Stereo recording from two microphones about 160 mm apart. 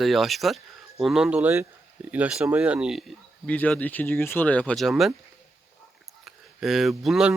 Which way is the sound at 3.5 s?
10° left (ahead or behind).